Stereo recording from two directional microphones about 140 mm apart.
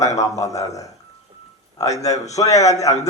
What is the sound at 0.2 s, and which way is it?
A man's voice, 25° left (ahead or behind).